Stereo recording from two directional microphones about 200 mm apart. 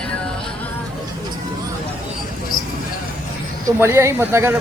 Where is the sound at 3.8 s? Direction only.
15° right (ahead or behind).